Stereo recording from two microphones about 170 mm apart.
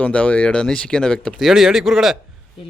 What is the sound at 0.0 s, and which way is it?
A man's voice, 10° left (ahead or behind).